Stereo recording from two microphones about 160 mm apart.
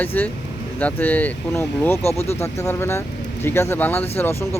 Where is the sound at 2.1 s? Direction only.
40° left (ahead or behind).